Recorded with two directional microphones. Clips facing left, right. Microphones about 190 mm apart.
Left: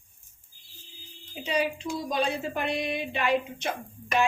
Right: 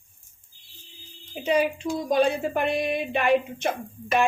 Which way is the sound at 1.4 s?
50° right (ahead or behind).